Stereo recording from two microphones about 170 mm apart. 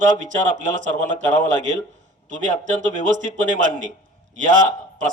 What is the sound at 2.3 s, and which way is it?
A man's voice, 50° right (ahead or behind).